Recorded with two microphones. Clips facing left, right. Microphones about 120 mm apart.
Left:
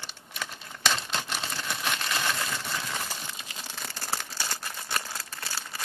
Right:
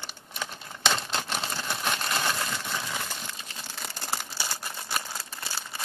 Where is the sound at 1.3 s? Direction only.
30° right (ahead or behind).